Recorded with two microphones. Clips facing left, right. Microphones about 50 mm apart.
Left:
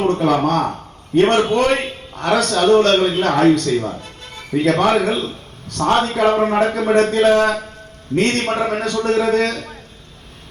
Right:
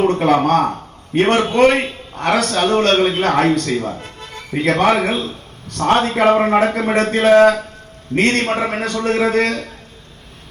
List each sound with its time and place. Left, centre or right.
0.0 s a man's voice: right